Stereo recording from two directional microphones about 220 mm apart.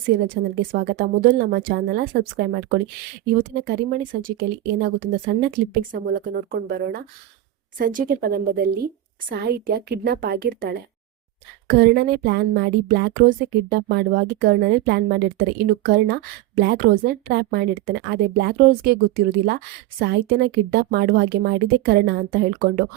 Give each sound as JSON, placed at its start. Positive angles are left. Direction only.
{"t": 0.7, "sound": "a woman's voice", "side_deg": -40}